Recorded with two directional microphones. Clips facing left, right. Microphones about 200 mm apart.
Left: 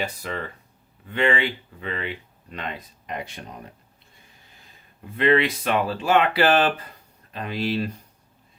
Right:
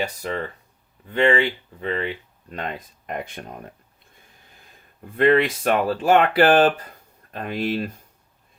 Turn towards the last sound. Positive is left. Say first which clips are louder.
# right 1 dB
turn(degrees=-50)  # may be behind; listen again after turning